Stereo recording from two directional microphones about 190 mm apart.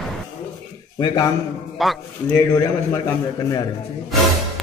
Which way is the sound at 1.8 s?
Centre (ahead or behind).